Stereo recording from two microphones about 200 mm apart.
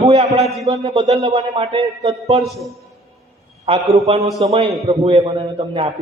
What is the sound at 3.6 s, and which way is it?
A man's voice, 30° right (ahead or behind).